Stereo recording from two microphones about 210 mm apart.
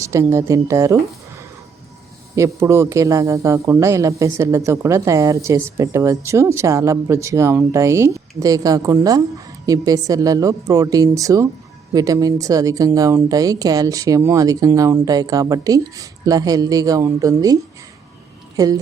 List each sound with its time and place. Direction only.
0.0 s a man's voice: 15° right (ahead or behind)
2.3 s a man's voice: 15° right (ahead or behind)